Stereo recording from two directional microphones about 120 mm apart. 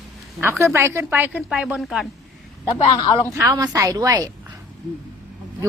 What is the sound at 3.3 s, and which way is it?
A woman's voice, 25° right (ahead or behind).